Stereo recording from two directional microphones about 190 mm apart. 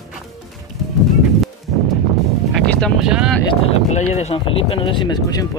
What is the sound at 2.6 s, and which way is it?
Vehicle, centre (ahead or behind).